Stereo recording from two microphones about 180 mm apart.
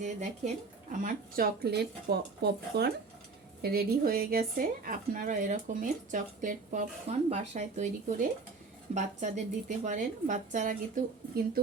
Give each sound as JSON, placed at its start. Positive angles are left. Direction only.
{"t": 0.0, "sound": "speech", "side_deg": -40}